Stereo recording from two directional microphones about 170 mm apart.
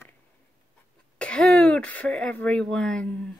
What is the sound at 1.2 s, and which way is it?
Speech, 5° left (ahead or behind).